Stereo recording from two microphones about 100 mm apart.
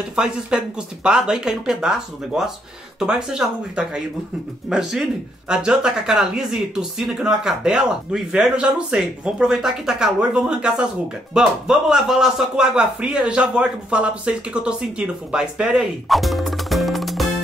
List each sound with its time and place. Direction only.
0.1 s a man's voice: 10° right (ahead or behind)